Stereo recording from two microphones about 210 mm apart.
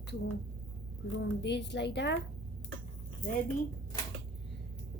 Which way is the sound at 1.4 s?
55° left (ahead or behind).